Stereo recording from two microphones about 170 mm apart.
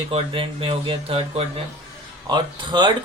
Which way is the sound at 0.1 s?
35° right (ahead or behind).